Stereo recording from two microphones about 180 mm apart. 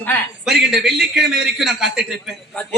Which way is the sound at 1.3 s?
65° right (ahead or behind).